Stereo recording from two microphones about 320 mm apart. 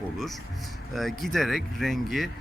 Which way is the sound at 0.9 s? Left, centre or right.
Centre.